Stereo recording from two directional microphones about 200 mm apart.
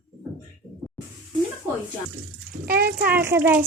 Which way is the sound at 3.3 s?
10° right (ahead or behind).